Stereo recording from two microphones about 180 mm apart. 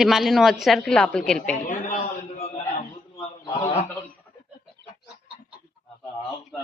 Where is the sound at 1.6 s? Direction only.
40° left (ahead or behind).